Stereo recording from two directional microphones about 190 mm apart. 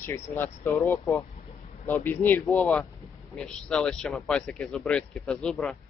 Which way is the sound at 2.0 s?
10° left (ahead or behind).